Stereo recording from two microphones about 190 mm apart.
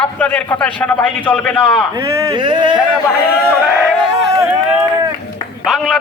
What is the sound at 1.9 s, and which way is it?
Speech, 15° right (ahead or behind).